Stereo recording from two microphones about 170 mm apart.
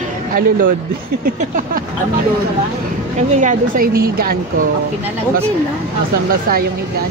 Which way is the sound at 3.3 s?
50° right (ahead or behind).